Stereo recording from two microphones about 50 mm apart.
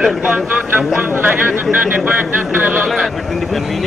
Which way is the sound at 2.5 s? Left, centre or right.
Right.